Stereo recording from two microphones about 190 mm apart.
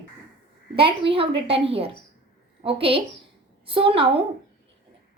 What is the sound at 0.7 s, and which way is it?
A woman's voice, 30° right (ahead or behind).